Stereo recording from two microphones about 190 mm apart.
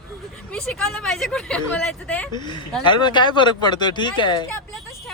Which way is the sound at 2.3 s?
25° left (ahead or behind).